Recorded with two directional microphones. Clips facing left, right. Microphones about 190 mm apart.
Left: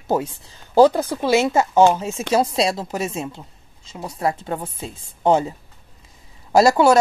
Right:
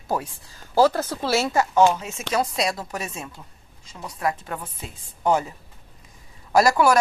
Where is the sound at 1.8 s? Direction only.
35° left (ahead or behind).